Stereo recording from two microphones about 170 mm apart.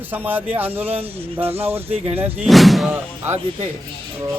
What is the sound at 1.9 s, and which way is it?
Speech, 35° right (ahead or behind).